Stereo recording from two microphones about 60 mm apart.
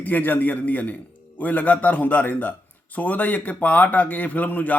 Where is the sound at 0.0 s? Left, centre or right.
Left.